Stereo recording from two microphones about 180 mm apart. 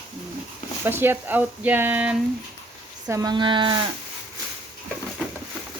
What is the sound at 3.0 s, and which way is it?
Speech, 20° right (ahead or behind).